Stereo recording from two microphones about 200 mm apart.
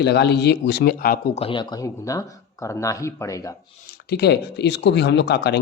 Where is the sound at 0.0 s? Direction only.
55° left (ahead or behind).